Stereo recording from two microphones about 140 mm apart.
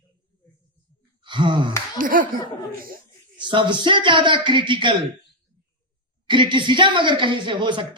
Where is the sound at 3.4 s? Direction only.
35° right (ahead or behind).